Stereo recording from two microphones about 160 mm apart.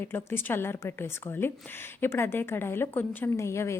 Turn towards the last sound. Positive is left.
turn(degrees=15)  # may be behind; listen again after turning